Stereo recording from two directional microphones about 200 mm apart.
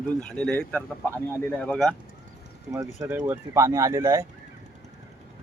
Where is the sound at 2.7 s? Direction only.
15° right (ahead or behind).